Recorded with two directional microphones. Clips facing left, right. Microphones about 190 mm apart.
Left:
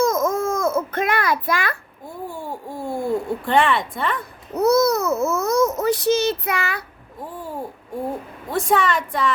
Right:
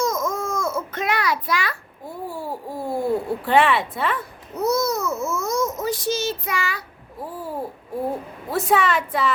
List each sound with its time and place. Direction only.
0.0 s a sound: 55° left (ahead or behind)
2.0 s speech: 5° right (ahead or behind)
4.5 s a child's voice: 65° left (ahead or behind)
7.2 s speech: 5° right (ahead or behind)